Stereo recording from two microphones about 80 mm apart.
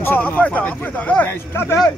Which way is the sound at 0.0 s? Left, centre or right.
Left.